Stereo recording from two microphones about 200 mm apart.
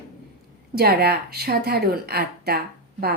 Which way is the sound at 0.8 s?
50° right (ahead or behind).